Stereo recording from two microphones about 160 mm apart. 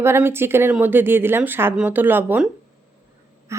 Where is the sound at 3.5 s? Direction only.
20° right (ahead or behind).